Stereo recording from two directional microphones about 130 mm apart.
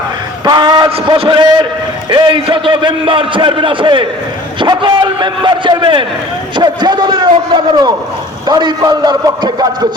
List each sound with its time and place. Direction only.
0.4 s a man's voice: 35° right (ahead or behind)